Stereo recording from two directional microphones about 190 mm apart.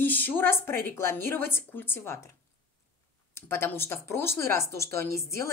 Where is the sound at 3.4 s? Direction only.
10° left (ahead or behind).